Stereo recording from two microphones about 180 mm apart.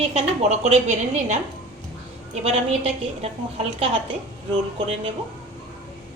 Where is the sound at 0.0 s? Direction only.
35° right (ahead or behind).